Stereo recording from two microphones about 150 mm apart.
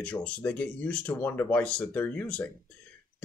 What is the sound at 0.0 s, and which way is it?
Speech, 10° left (ahead or behind).